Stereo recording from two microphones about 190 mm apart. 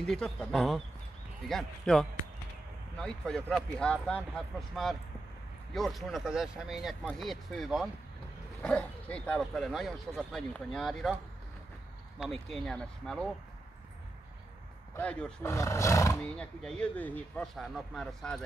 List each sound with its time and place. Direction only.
0.0 s speech: 5° left (ahead or behind)
12.2 s speech: centre (ahead or behind)
15.0 s speech: 5° left (ahead or behind)
15.5 s speech: 15° left (ahead or behind)
16.2 s speech: 5° left (ahead or behind)